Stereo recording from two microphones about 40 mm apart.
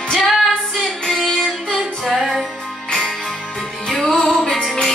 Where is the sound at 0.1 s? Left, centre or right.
Centre.